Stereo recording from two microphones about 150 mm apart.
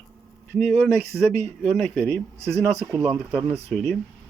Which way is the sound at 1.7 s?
10° left (ahead or behind).